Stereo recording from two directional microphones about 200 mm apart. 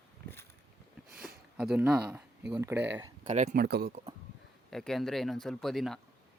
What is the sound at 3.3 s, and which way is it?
Speech, 35° right (ahead or behind).